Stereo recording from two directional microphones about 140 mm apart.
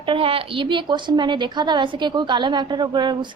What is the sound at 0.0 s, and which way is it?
A woman's voice, 40° right (ahead or behind).